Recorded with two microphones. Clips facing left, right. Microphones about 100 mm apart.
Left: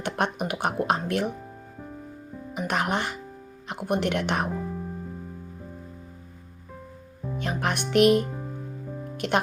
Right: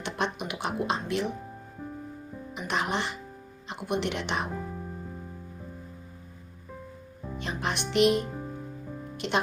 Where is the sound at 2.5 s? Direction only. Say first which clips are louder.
Left 3 dB; 50° left (ahead or behind).